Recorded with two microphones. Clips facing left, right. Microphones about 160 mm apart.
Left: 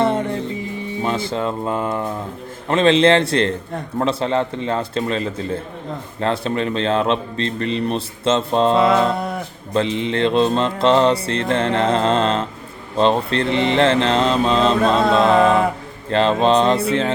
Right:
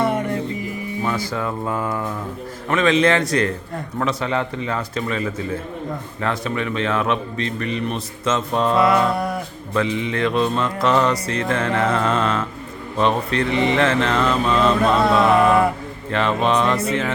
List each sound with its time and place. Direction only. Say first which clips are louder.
0.0 s music: left 2 dB; 25° left (ahead or behind)
2.6 s livestock: left 3 dB; 30° left (ahead or behind)
6.1 s speech: left 4 dB; 30° left (ahead or behind)
7.6 s livestock: left 6 dB; 30° left (ahead or behind)